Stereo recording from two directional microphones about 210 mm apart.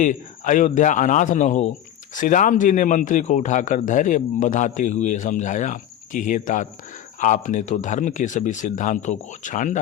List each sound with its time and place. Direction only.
0.0 s a man's voice: 40° left (ahead or behind)